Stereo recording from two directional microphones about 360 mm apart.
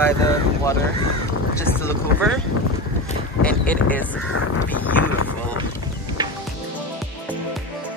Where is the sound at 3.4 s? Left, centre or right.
Centre.